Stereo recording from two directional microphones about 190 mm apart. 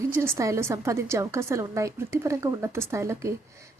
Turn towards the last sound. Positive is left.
turn(degrees=-15)  # may be behind; listen again after turning